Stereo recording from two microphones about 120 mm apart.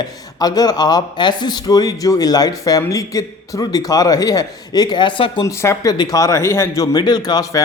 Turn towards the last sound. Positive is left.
turn(degrees=35)  # may be behind; listen again after turning